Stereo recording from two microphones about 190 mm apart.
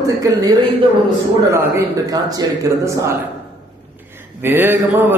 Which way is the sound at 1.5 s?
20° right (ahead or behind).